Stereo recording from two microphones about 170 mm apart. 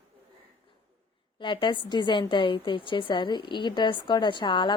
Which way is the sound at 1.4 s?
30° left (ahead or behind).